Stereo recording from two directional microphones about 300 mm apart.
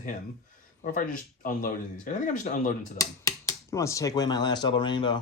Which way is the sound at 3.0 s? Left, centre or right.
Centre.